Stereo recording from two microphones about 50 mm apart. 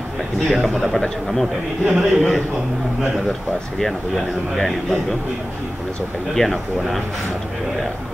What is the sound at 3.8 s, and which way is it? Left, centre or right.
A man's voice, centre.